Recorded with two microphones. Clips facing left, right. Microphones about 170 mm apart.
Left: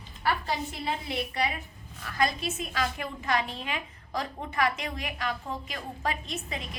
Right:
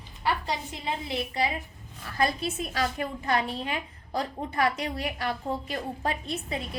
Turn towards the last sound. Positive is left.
turn(degrees=-35)  # may be behind; listen again after turning